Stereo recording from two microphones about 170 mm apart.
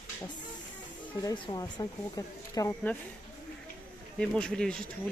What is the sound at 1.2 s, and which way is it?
Speech, 25° left (ahead or behind).